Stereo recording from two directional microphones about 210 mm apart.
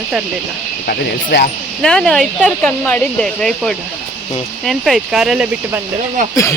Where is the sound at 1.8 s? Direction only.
5° left (ahead or behind).